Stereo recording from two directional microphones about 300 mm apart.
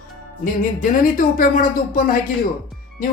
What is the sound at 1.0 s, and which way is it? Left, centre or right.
Speech, left.